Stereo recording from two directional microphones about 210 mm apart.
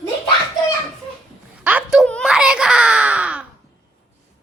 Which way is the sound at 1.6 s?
5° right (ahead or behind).